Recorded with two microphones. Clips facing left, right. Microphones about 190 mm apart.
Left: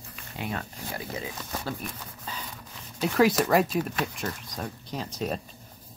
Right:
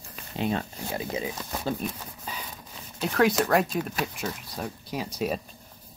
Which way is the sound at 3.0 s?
Centre (ahead or behind).